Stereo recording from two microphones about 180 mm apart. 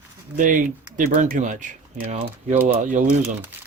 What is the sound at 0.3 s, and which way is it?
Speech, 45° right (ahead or behind).